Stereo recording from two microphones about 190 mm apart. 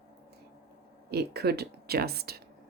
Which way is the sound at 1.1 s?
55° right (ahead or behind).